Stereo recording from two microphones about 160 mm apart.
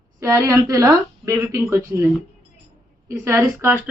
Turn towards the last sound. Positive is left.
turn(degrees=-15)  # may be behind; listen again after turning